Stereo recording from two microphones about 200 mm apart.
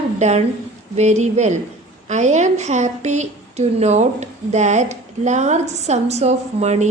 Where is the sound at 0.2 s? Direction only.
35° right (ahead or behind).